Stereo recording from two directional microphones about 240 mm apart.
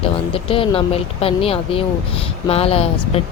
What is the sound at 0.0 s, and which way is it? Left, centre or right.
Speech, left.